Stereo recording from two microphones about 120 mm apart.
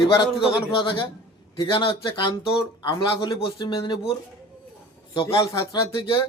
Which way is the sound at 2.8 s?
35° left (ahead or behind).